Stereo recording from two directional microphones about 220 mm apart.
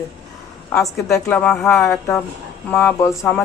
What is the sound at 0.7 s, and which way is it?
Speech, 15° left (ahead or behind).